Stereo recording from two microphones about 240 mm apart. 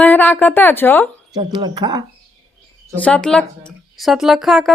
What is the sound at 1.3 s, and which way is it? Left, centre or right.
Speech, centre.